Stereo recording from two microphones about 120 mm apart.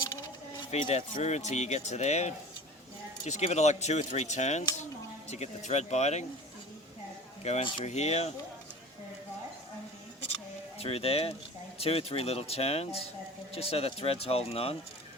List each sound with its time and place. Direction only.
0.0 s keys jangling: 40° left (ahead or behind)
0.9 s speech: 65° left (ahead or behind)
7.4 s speech: 70° left (ahead or behind)
10.8 s speech: 55° left (ahead or behind)